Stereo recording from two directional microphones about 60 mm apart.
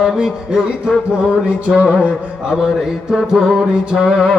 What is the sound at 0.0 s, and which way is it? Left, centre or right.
Mantra, centre.